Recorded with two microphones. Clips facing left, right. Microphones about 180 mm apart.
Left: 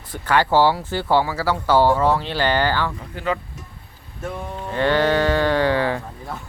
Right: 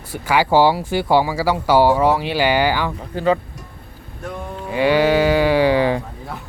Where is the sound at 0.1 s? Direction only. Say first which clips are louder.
Right 2 dB; 10° right (ahead or behind).